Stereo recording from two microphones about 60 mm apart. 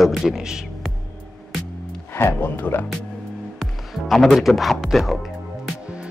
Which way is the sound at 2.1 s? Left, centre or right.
Left.